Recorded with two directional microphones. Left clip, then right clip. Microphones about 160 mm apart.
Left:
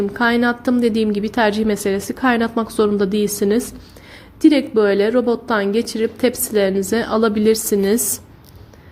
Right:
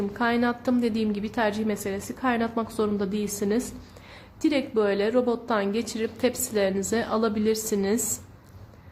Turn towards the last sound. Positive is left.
turn(degrees=20)  # may be behind; listen again after turning